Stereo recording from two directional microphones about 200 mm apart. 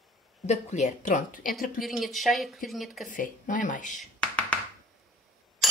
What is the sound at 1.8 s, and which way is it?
Speech, centre (ahead or behind).